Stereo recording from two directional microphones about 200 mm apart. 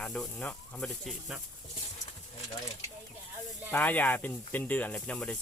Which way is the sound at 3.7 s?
10° left (ahead or behind).